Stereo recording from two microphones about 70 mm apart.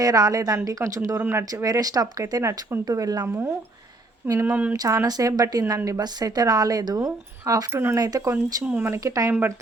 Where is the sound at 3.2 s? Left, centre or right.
Right.